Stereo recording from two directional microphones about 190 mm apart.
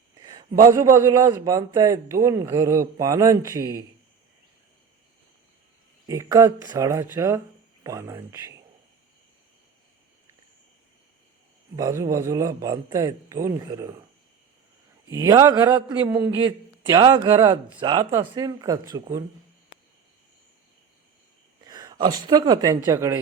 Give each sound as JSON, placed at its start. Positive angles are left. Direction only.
{"t": 0.2, "sound": "a sound", "side_deg": -20}
{"t": 0.7, "sound": "a man's voice", "side_deg": -15}
{"t": 6.1, "sound": "a man's voice", "side_deg": -15}
{"t": 11.8, "sound": "a man's voice", "side_deg": -15}
{"t": 15.1, "sound": "a man's voice", "side_deg": -15}
{"t": 21.6, "sound": "speech", "side_deg": -20}